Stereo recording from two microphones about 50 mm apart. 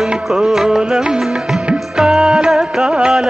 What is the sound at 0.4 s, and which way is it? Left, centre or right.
Music, centre.